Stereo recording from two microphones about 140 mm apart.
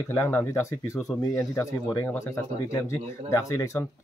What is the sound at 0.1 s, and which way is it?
Speech, 15° left (ahead or behind).